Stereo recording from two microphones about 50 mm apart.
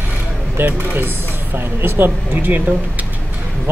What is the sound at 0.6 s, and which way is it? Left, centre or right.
Speech, right.